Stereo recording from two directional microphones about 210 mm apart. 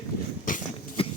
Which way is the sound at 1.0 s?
25° left (ahead or behind).